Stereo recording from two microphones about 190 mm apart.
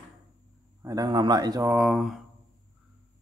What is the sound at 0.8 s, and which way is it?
Speech, 20° right (ahead or behind).